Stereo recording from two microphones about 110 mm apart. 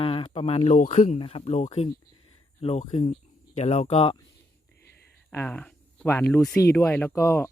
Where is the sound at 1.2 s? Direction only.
55° left (ahead or behind).